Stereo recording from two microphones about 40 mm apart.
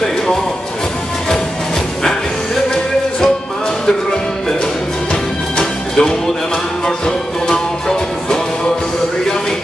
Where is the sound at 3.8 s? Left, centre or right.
Centre.